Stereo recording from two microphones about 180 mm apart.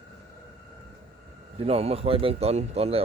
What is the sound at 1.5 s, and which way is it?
Speech, 35° right (ahead or behind).